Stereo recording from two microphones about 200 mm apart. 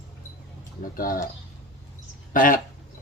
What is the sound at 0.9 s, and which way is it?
Speech, 45° left (ahead or behind).